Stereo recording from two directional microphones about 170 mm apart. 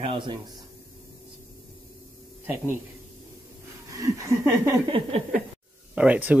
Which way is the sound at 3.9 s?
20° right (ahead or behind).